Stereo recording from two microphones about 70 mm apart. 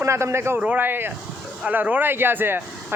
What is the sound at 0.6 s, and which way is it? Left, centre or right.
Speech, right.